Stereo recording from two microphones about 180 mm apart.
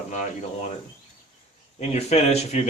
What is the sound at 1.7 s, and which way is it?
Speech, 40° left (ahead or behind).